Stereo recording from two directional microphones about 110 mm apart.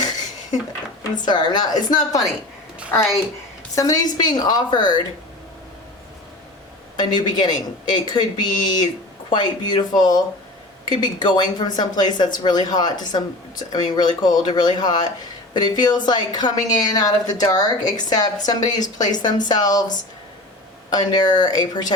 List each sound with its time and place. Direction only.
1.2 s speech: 40° left (ahead or behind)
3.8 s speech: 35° left (ahead or behind)
6.9 s speech: 40° left (ahead or behind)
20.9 s speech: 40° left (ahead or behind)